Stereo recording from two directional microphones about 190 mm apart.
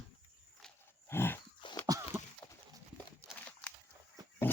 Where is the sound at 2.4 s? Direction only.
15° left (ahead or behind).